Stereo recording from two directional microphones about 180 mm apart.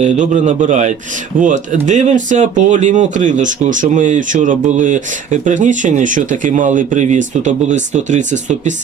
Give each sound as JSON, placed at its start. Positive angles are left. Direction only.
{"t": 0.0, "sound": "speech", "side_deg": -45}